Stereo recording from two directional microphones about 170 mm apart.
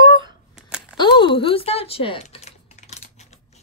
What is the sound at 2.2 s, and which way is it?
Typing, 40° left (ahead or behind).